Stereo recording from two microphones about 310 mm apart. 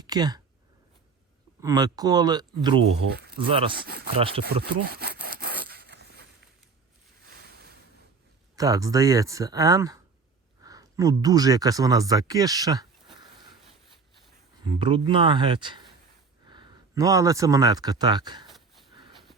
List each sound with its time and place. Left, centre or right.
0.0 s speech: centre
1.6 s speech: centre
3.1 s speech: right
3.3 s speech: centre
3.8 s rub: right
4.2 s speech: centre
4.6 s sawing: right
7.3 s a sound: right
8.5 s speech: centre
14.6 s speech: centre
18.4 s a sound: centre